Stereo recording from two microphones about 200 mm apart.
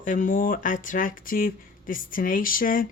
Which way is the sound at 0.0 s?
40° left (ahead or behind).